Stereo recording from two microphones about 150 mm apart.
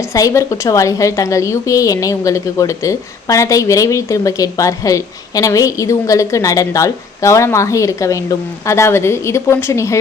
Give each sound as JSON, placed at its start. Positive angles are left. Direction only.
{"t": 0.1, "sound": "a woman's voice", "side_deg": 20}